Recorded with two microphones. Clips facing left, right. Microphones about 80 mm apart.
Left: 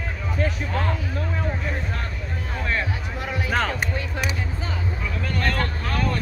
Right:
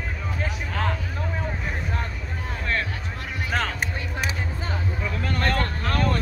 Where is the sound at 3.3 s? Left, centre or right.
Centre.